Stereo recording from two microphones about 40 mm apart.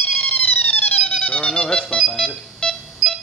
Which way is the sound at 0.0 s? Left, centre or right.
Left.